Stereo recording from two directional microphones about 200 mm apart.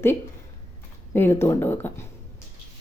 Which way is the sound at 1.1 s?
10° left (ahead or behind).